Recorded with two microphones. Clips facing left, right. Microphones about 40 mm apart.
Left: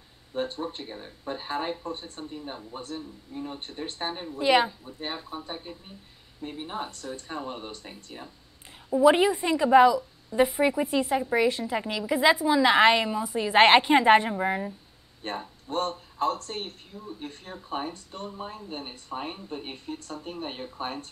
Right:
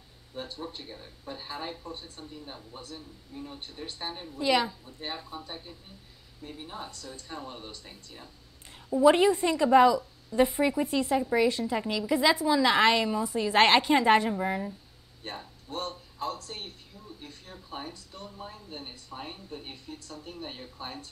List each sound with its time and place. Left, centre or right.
0.3 s speech: left
4.1 s speech: left
8.9 s a woman's voice: centre
15.2 s speech: left